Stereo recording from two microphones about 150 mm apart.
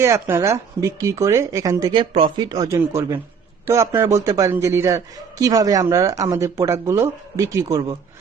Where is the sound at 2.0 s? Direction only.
35° right (ahead or behind).